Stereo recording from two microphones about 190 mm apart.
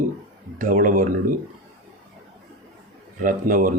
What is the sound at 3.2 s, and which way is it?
Speech, 45° right (ahead or behind).